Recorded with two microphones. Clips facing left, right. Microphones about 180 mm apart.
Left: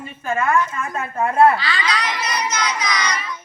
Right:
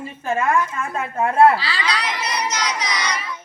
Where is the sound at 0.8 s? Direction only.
25° right (ahead or behind).